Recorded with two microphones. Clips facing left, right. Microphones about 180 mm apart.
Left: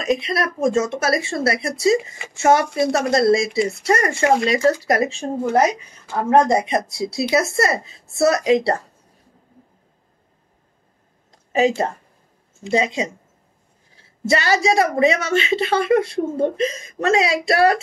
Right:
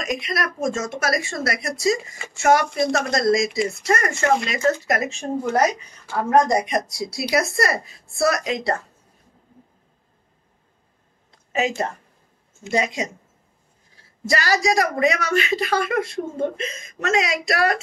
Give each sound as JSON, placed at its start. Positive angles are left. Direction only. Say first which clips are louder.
{"t": 0.0, "sound": "a woman's voice", "louder": "left 5 dB", "side_deg": 30}
{"t": 6.3, "sound": "a woman's voice", "louder": "left 2 dB", "side_deg": 25}
{"t": 11.5, "sound": "a woman's voice", "louder": "left 5 dB", "side_deg": 30}
{"t": 14.2, "sound": "a woman's voice", "louder": "left 3 dB", "side_deg": 25}